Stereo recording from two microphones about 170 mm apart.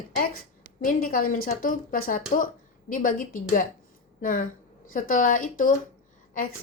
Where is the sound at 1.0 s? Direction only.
55° left (ahead or behind).